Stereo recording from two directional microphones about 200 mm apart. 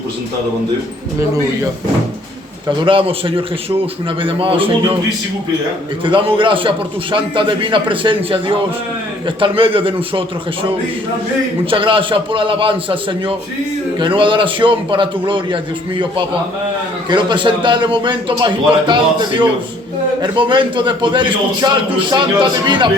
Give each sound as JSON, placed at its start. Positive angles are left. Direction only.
{"t": 2.6, "sound": "a man's voice", "side_deg": -25}
{"t": 6.1, "sound": "a man's voice", "side_deg": -25}
{"t": 20.2, "sound": "a man's voice", "side_deg": -25}